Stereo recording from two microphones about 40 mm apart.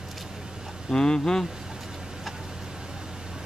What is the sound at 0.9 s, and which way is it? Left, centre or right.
Speech, centre.